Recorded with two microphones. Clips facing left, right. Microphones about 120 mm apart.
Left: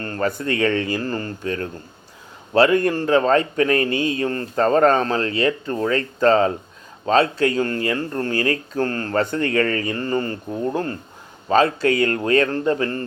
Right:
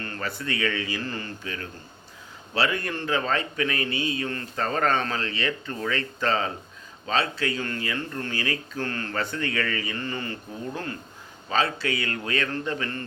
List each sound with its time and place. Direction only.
0.0 s a man's voice: 40° left (ahead or behind)
11.4 s speech: 45° left (ahead or behind)